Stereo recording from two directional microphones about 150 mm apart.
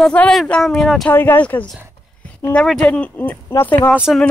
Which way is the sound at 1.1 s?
15° left (ahead or behind).